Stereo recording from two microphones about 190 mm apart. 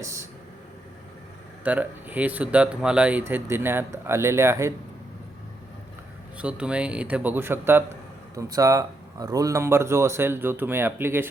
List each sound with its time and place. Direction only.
0.0 s vehicle: 15° right (ahead or behind)
1.6 s speech: 10° right (ahead or behind)
6.3 s speech: 5° right (ahead or behind)